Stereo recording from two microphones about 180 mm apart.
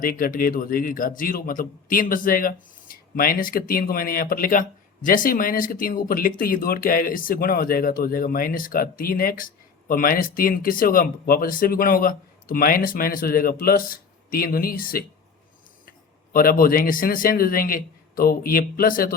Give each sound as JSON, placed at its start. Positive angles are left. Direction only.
{"t": 0.0, "sound": "speech", "side_deg": 50}